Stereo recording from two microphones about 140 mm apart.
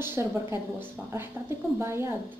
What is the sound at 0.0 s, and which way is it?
A woman's voice, 15° right (ahead or behind).